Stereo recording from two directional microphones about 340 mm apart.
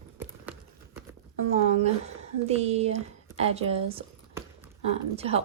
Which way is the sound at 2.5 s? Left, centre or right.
Centre.